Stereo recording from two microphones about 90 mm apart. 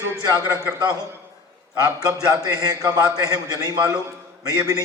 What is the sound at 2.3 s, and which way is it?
A man's voice, 45° right (ahead or behind).